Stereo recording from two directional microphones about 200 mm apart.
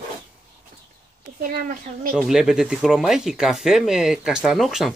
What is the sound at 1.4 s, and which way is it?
Speech, 45° right (ahead or behind).